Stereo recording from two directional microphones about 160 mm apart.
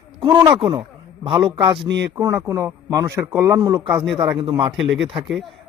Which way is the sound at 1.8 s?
90° right.